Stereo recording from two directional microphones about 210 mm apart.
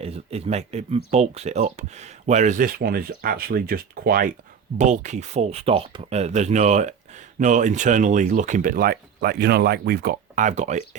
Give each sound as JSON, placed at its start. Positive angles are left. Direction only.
{"t": 0.0, "sound": "speech", "side_deg": -30}